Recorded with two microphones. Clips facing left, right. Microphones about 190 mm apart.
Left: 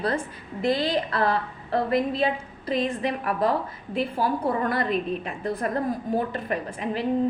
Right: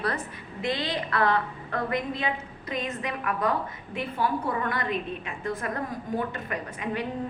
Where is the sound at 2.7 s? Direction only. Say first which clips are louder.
Left 6 dB; 35° left (ahead or behind).